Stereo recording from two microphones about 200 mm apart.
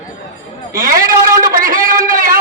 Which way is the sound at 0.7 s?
45° right (ahead or behind).